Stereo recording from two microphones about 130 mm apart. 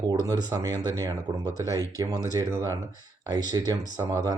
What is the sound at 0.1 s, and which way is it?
Speech, 30° right (ahead or behind).